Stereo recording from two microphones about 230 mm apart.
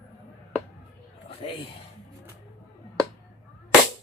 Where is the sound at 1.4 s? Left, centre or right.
Left.